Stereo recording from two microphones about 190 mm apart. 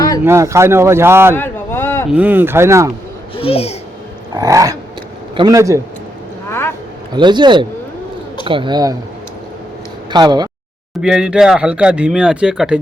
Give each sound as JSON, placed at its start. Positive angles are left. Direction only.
{"t": 0.3, "sound": "speech", "side_deg": -15}
{"t": 1.4, "sound": "a sound", "side_deg": 10}
{"t": 2.0, "sound": "speech", "side_deg": -5}
{"t": 3.3, "sound": "speech", "side_deg": 30}
{"t": 4.4, "sound": "speech", "side_deg": -15}
{"t": 6.5, "sound": "a sound", "side_deg": 10}
{"t": 7.1, "sound": "a man's voice", "side_deg": -25}
{"t": 10.1, "sound": "speech", "side_deg": -20}
{"t": 11.0, "sound": "speech", "side_deg": -5}